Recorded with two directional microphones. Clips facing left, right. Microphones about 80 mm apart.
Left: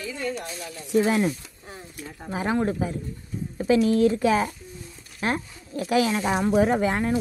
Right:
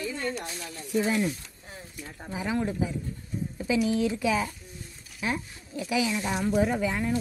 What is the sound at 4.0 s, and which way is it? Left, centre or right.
Speech, left.